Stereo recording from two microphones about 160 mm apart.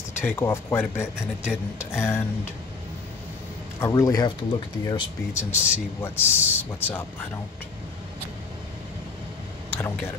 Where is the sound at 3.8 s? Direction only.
20° left (ahead or behind).